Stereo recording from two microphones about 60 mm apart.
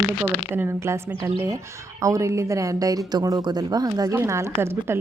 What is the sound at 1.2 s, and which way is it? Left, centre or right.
Speech, right.